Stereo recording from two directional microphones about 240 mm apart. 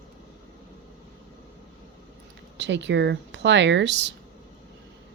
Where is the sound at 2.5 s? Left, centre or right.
Right.